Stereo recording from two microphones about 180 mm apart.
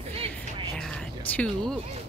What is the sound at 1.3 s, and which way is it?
Speech, 5° left (ahead or behind).